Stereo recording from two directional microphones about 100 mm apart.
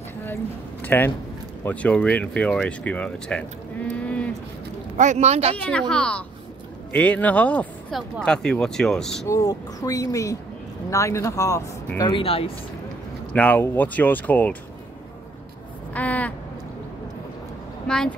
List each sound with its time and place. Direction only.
0.8 s speech: 20° left (ahead or behind)
3.9 s a sound: 10° left (ahead or behind)
5.3 s speech: 90° right
5.6 s speech: 10° left (ahead or behind)
9.3 s speech: 35° left (ahead or behind)
12.2 s speech: 70° left (ahead or behind)
13.3 s speech: 15° left (ahead or behind)
15.9 s a sound: 15° left (ahead or behind)
17.8 s speech: 5° left (ahead or behind)